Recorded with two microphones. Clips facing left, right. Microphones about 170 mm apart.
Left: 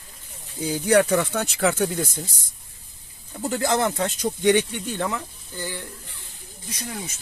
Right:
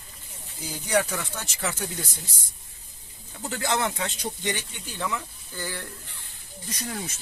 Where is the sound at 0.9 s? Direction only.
60° left (ahead or behind).